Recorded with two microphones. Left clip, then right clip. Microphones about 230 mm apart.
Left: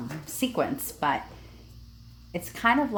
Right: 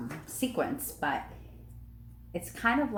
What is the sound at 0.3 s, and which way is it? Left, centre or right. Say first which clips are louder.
Speech: left 4 dB; left.